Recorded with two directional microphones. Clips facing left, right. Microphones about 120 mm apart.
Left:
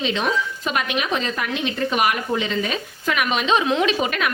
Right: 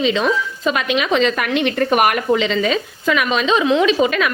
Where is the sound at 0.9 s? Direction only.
90° right; by 2.2 s 55° right (ahead or behind).